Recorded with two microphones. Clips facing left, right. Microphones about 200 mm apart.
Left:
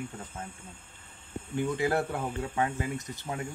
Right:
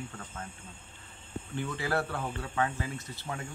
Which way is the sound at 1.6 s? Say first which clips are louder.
Left 4 dB; 20° left (ahead or behind).